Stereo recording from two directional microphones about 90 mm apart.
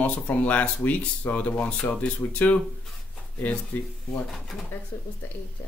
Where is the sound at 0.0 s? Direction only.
15° left (ahead or behind).